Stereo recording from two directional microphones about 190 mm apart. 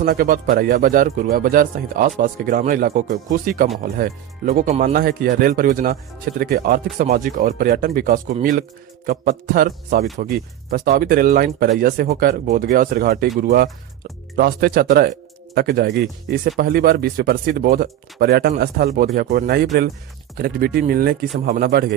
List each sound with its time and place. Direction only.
0.0 s a man's voice: 50° right (ahead or behind)